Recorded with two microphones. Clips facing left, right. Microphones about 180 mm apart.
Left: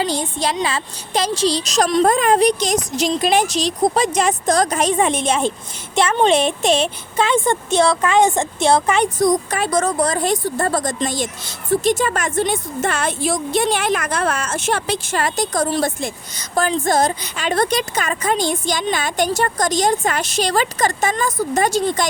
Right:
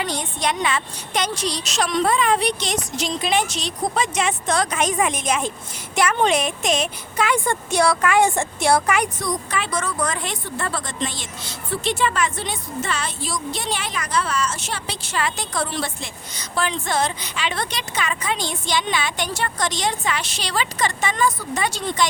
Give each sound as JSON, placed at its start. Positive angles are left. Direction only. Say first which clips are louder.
{"t": 0.0, "sound": "speech", "louder": "left 4 dB", "side_deg": 30}
{"t": 9.2, "sound": "speech", "louder": "left 8 dB", "side_deg": 45}